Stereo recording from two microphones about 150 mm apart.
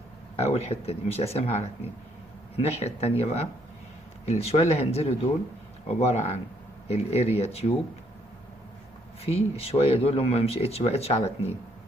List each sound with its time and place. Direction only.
0.4 s speech: 45° left (ahead or behind)
9.2 s speech: 40° left (ahead or behind)